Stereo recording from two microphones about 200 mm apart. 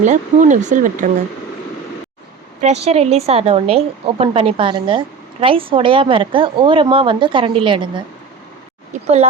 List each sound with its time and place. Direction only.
0.0 s speech: 35° right (ahead or behind)
2.6 s a woman's voice: 35° right (ahead or behind)
8.9 s speech: 35° right (ahead or behind)